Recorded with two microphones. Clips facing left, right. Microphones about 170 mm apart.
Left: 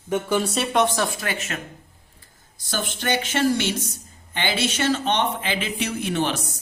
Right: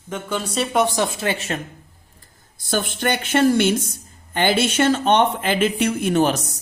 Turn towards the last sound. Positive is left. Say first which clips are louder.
# right 6 dB
turn(degrees=-40)  # may be behind; listen again after turning